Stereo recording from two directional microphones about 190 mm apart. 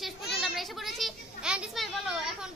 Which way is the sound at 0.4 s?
Centre (ahead or behind).